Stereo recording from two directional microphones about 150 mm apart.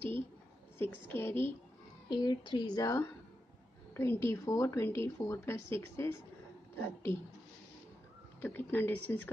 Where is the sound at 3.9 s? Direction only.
15° left (ahead or behind).